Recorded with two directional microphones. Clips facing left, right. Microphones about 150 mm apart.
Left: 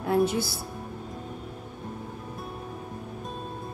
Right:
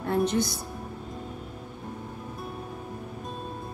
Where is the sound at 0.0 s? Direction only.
5° left (ahead or behind).